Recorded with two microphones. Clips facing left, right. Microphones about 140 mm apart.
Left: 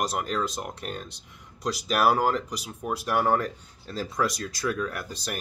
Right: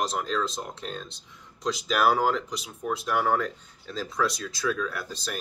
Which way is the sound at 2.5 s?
10° left (ahead or behind).